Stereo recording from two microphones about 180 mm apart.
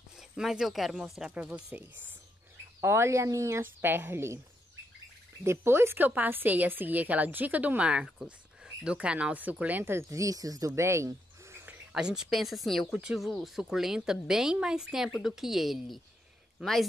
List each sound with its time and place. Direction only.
0.2 s a woman's voice: centre (ahead or behind)
5.4 s a woman's voice: 15° right (ahead or behind)
11.9 s speech: 5° right (ahead or behind)